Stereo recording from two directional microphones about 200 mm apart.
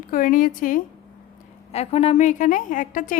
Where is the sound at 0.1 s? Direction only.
40° left (ahead or behind).